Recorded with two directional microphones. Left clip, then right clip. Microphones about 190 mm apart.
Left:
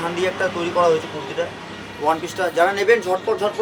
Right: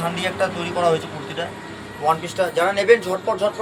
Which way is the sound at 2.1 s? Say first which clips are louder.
Right 1 dB; 30° left (ahead or behind).